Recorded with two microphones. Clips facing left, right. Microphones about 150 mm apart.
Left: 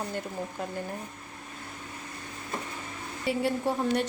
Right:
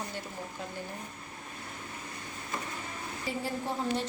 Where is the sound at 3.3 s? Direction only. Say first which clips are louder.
Left 7 dB; 70° left (ahead or behind).